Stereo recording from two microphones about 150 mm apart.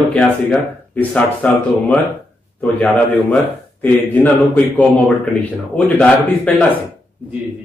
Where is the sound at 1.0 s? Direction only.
10° left (ahead or behind).